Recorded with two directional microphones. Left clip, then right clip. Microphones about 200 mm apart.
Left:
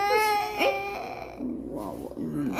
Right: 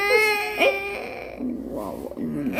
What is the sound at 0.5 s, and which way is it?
Dog, 10° left (ahead or behind).